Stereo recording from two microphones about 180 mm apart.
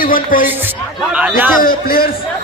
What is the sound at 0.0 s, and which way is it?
Speech, 50° left (ahead or behind).